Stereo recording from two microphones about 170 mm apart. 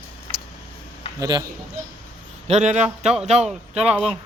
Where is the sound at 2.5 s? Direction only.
45° right (ahead or behind).